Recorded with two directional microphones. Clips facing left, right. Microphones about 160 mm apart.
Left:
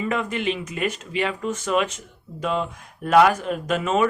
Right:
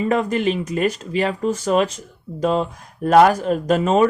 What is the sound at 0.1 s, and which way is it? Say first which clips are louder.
Speech: right 7 dB; 40° right (ahead or behind).